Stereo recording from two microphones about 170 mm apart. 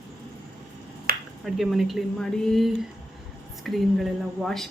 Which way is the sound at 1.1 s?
60° right (ahead or behind).